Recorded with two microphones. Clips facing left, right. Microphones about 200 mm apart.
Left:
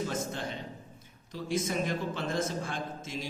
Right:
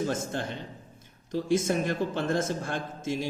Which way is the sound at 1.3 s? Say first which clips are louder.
Right 6 dB; 50° right (ahead or behind).